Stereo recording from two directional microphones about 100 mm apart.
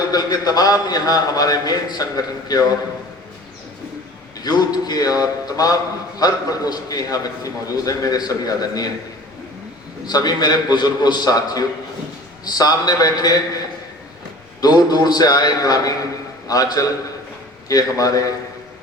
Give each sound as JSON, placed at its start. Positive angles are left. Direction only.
{"t": 0.1, "sound": "a man's voice", "side_deg": 40}
{"t": 4.4, "sound": "a sound", "side_deg": 45}
{"t": 5.5, "sound": "a man's voice", "side_deg": 40}
{"t": 10.1, "sound": "a man's voice", "side_deg": 40}
{"t": 14.6, "sound": "a man's voice", "side_deg": 45}